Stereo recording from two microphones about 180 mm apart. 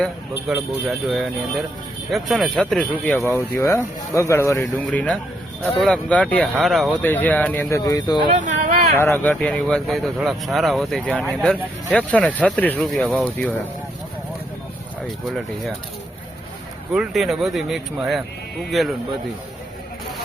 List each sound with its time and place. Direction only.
0.0 s speech: centre (ahead or behind)
3.3 s speech: 15° left (ahead or behind)
8.3 s speech: 45° right (ahead or behind)
9.0 s speech: 10° left (ahead or behind)
16.9 s speech: 5° right (ahead or behind)